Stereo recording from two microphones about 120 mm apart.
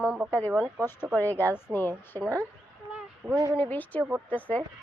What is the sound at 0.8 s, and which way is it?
Speech, 25° right (ahead or behind).